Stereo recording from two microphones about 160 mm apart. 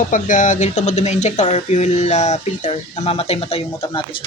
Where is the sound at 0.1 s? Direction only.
50° left (ahead or behind); by 4.0 s 35° left (ahead or behind).